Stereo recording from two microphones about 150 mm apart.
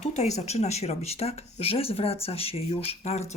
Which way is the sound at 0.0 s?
50° left (ahead or behind).